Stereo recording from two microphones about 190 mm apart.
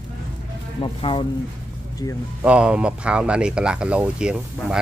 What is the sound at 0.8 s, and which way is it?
Speech, 25° left (ahead or behind).